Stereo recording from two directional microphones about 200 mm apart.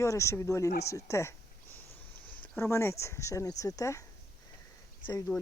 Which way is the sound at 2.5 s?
10° left (ahead or behind).